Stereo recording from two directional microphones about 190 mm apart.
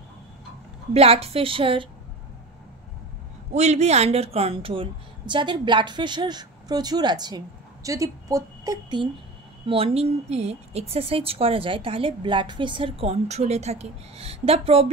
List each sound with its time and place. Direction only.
0.9 s a woman's voice: 30° right (ahead or behind)
3.5 s a woman's voice: 35° right (ahead or behind)